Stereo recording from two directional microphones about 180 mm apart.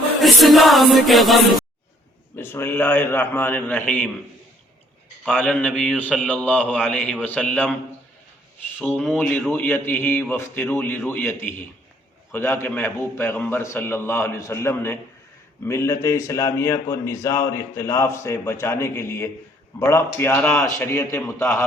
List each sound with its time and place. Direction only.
0.2 s music: centre (ahead or behind)
2.3 s a man's voice: 10° left (ahead or behind)
5.4 s a man's voice: 5° left (ahead or behind)
9.1 s a man's voice: 10° left (ahead or behind)